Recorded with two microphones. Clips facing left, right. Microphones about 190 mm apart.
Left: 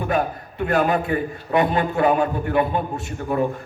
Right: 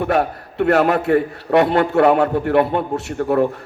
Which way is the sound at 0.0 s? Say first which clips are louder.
Right 4 dB; 70° right (ahead or behind).